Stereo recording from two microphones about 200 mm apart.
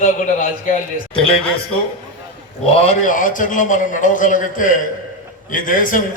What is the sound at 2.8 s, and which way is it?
A man's voice, 40° left (ahead or behind).